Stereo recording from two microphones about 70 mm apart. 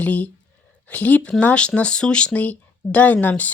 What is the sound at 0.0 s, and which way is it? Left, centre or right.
Speech, left.